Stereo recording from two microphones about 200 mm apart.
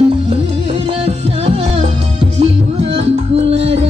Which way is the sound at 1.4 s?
30° right (ahead or behind).